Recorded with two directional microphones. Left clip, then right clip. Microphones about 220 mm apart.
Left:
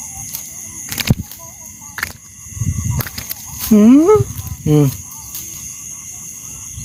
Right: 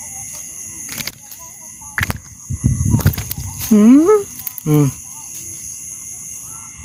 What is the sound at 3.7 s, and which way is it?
Speech, 5° right (ahead or behind).